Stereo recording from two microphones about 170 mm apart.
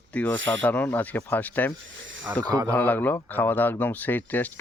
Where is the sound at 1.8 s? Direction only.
90° right.